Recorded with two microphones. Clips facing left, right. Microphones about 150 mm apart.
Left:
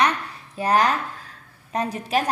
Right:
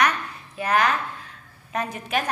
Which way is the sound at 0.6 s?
35° left (ahead or behind).